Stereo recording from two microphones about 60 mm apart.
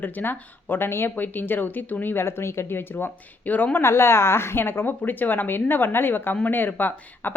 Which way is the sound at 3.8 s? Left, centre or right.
Left.